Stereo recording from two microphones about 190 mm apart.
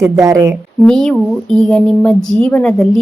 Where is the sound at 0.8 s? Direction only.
5° left (ahead or behind).